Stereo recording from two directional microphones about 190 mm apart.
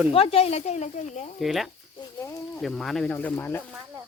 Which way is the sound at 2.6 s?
Centre (ahead or behind).